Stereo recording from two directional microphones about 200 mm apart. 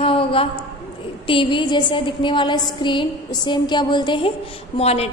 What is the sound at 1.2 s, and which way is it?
A woman's voice, 25° left (ahead or behind).